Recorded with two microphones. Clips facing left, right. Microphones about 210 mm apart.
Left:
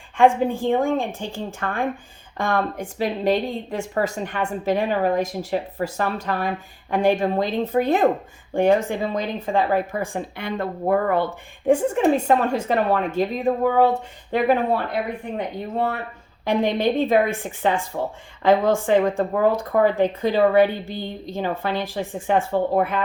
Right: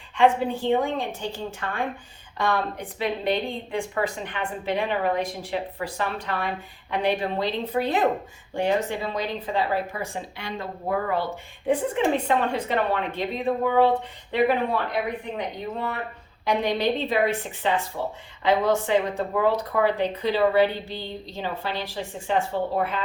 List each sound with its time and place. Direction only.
0.2 s speech: 50° left (ahead or behind)
16.4 s speech: 50° left (ahead or behind)